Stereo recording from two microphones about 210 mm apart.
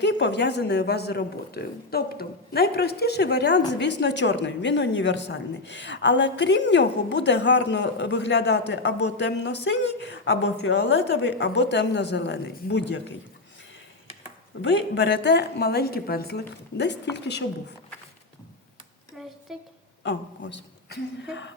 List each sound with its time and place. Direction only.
0.0 s a woman's voice: 55° left (ahead or behind)
14.6 s a woman's voice: 55° left (ahead or behind)
19.2 s a sound: centre (ahead or behind)
20.1 s a man's voice: 60° left (ahead or behind)